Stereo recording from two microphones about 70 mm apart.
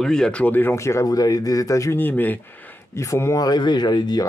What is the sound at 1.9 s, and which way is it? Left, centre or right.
Speech, left.